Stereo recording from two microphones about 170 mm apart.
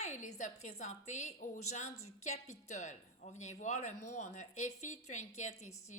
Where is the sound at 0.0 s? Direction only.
45° left (ahead or behind).